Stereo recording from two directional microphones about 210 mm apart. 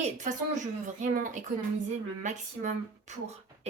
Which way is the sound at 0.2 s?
35° right (ahead or behind).